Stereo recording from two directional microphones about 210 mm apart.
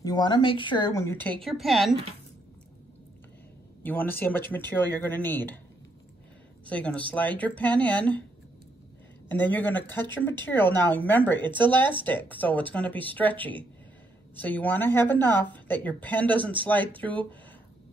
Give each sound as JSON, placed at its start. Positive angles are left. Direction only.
{"t": 0.0, "sound": "speech", "side_deg": 20}
{"t": 3.8, "sound": "speech", "side_deg": 10}
{"t": 6.6, "sound": "speech", "side_deg": 5}
{"t": 9.3, "sound": "speech", "side_deg": 10}